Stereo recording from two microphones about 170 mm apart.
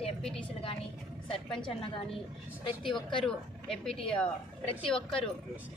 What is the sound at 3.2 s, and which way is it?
Speech, 5° left (ahead or behind).